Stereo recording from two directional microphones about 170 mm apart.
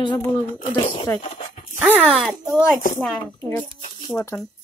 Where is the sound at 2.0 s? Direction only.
Centre (ahead or behind).